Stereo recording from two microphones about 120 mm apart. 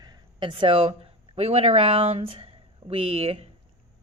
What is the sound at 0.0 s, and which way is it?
Speech, 40° right (ahead or behind).